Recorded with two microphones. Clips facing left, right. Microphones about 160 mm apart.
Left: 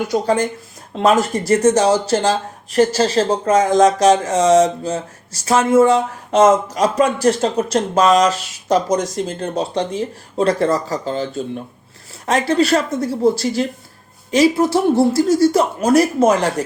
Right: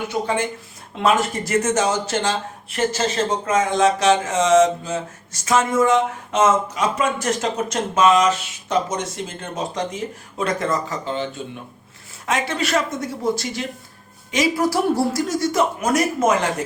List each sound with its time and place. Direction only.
0.1 s speech: 40° left (ahead or behind)